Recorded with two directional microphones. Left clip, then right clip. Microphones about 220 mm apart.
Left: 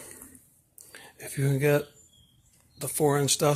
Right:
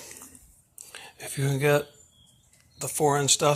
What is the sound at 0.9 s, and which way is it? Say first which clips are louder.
Speech: right 3 dB; 20° left (ahead or behind).